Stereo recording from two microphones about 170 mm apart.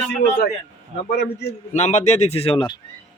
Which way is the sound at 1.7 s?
45° left (ahead or behind).